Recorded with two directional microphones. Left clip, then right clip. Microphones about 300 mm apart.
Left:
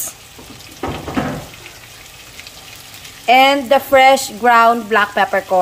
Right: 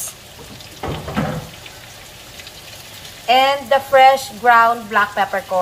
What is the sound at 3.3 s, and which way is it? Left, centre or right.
A woman's voice, left.